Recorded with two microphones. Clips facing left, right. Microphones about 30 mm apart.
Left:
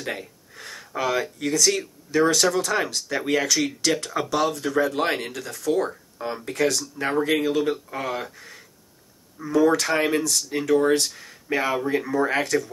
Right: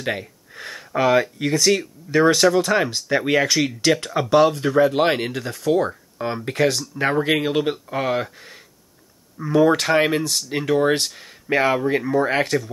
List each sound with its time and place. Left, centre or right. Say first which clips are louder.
0.0 s speech: right 5 dB; right
6.4 s speech: right 3 dB; right
7.0 s speech: right 5 dB; centre
7.3 s speech: right 1 dB; right